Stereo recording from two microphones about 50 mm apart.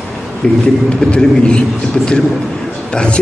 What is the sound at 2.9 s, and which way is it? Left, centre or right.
Speech, centre.